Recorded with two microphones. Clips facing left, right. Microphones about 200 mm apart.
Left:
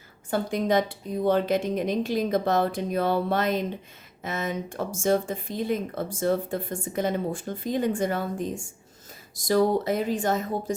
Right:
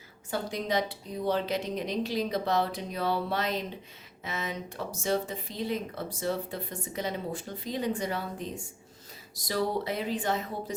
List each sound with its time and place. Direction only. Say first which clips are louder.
0.3 s speech: left 6 dB; 50° left (ahead or behind)